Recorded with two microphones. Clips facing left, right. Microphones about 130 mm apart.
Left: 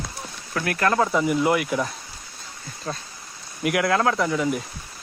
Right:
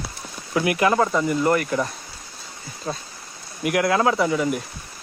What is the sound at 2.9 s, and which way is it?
Speech, 10° right (ahead or behind).